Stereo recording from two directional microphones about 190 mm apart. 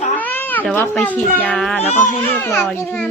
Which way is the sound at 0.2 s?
10° left (ahead or behind).